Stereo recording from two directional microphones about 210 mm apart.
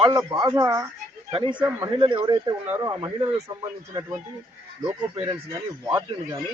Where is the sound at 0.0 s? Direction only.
15° right (ahead or behind).